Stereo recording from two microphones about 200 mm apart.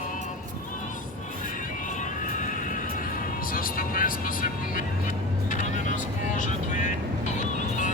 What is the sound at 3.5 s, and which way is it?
Vehicle, 45° left (ahead or behind).